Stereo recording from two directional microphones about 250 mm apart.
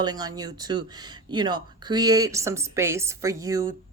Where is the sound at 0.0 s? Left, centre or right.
Centre.